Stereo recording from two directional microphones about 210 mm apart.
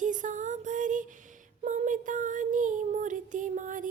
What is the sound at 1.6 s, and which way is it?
Child singing, 35° right (ahead or behind).